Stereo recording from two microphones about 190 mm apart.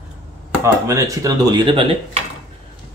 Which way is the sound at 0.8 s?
15° right (ahead or behind).